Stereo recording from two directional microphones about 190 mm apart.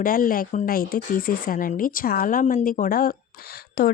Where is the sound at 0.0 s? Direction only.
50° left (ahead or behind).